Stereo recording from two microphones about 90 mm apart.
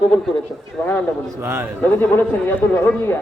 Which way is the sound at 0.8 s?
20° left (ahead or behind).